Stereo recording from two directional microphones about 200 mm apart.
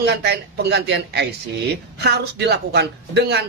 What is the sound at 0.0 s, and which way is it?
Speech, 55° right (ahead or behind).